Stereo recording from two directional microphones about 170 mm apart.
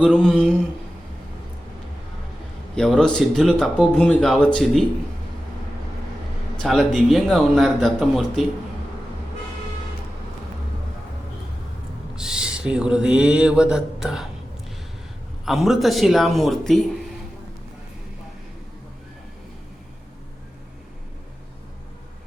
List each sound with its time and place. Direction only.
0.0 s speech: centre (ahead or behind)
2.7 s speech: 5° left (ahead or behind)
6.6 s speech: centre (ahead or behind)
12.1 s speech: 5° right (ahead or behind)
15.4 s speech: centre (ahead or behind)